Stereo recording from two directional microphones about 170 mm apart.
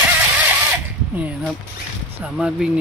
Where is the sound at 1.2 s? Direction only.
10° right (ahead or behind).